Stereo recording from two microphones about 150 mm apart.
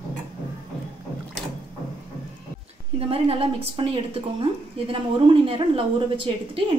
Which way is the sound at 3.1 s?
40° right (ahead or behind).